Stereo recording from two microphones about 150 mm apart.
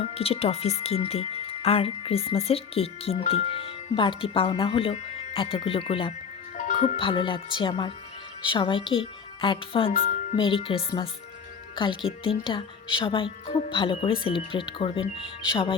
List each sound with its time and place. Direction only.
0.0 s speech: 40° left (ahead or behind)
6.6 s music: 55° left (ahead or behind)
6.8 s speech: 35° left (ahead or behind)
9.9 s music: 70° left (ahead or behind)
10.3 s speech: 35° left (ahead or behind)